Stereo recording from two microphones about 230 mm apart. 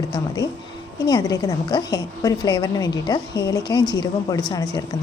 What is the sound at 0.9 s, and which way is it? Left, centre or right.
A woman's voice, centre.